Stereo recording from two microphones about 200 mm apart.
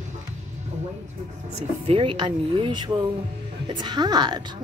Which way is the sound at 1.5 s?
30° right (ahead or behind).